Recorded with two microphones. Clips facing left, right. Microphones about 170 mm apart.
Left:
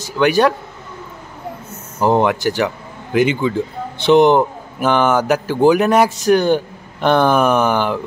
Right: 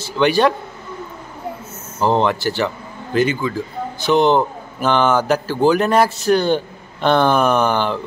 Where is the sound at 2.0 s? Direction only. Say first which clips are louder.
Left 2 dB; 10° left (ahead or behind).